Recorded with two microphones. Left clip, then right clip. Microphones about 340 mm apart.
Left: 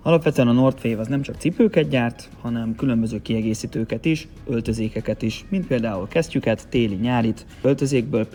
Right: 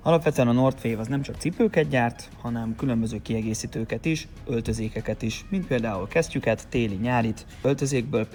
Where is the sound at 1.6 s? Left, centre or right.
Left.